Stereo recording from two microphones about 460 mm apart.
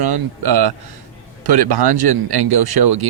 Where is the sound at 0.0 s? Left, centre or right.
Right.